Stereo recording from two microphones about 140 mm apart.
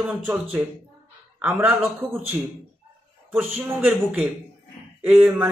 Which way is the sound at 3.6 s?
15° right (ahead or behind).